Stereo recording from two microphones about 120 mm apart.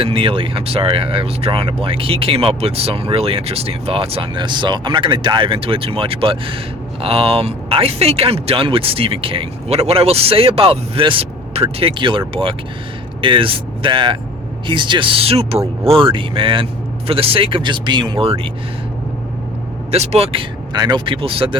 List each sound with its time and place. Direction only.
0.0 s speech: 50° right (ahead or behind)
19.9 s speech: 60° right (ahead or behind)
20.7 s speech: 35° right (ahead or behind)